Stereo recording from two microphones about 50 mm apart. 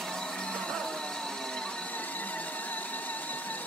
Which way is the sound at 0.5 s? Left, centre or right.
Centre.